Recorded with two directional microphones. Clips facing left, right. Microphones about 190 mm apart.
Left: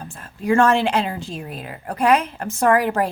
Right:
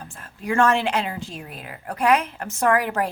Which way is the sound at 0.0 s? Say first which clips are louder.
Left 6 dB; 35° left (ahead or behind).